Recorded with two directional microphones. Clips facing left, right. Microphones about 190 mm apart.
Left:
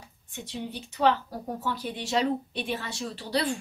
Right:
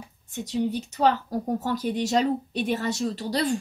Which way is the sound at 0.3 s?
40° right (ahead or behind).